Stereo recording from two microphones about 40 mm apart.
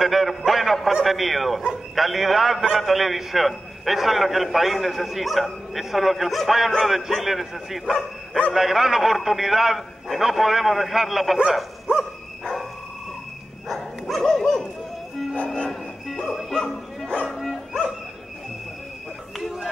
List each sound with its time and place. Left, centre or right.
0.0 s a man's voice: centre
13.7 s dog: centre
15.3 s music: left
16.3 s music: centre
17.3 s bow-wow: centre